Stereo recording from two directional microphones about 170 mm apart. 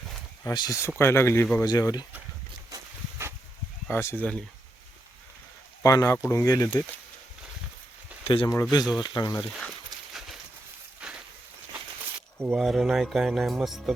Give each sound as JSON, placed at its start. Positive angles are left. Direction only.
{"t": 0.4, "sound": "speech", "side_deg": 20}
{"t": 2.6, "sound": "a sound", "side_deg": -15}
{"t": 3.8, "sound": "speech", "side_deg": 15}
{"t": 5.8, "sound": "speech", "side_deg": 20}
{"t": 8.2, "sound": "speech", "side_deg": 30}
{"t": 10.1, "sound": "horse", "side_deg": 0}
{"t": 11.0, "sound": "a sound", "side_deg": -5}
{"t": 12.4, "sound": "speech", "side_deg": -5}